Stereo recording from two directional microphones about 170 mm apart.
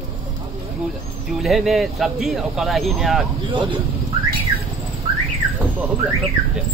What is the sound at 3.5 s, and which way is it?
Speech, 30° right (ahead or behind).